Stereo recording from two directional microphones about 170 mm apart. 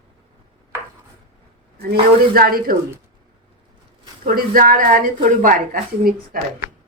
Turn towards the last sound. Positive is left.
turn(degrees=-55)  # may be behind; listen again after turning